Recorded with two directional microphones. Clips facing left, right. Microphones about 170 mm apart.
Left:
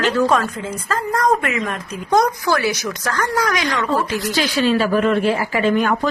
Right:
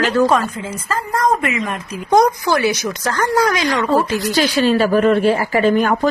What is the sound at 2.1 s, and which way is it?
Speech, 20° right (ahead or behind).